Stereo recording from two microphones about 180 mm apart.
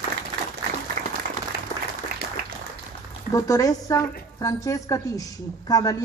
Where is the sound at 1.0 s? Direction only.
45° right (ahead or behind).